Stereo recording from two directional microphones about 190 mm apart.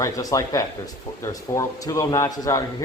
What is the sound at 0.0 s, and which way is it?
A man's voice, 15° left (ahead or behind).